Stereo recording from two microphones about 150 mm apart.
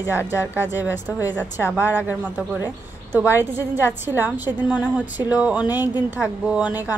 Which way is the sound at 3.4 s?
15° right (ahead or behind).